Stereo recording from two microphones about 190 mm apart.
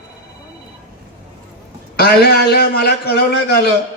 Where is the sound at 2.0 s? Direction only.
55° left (ahead or behind).